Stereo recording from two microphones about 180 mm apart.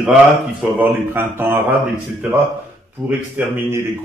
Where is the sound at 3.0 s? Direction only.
10° right (ahead or behind).